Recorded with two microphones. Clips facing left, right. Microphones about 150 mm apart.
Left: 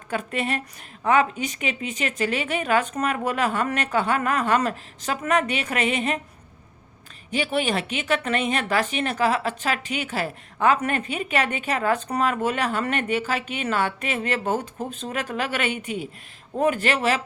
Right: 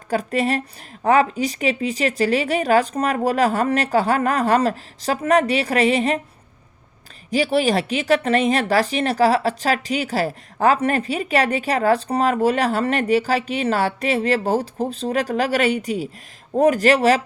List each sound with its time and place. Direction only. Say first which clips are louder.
0.1 s speech: right 6 dB; 35° right (ahead or behind)
7.3 s speech: right 6 dB; 35° right (ahead or behind)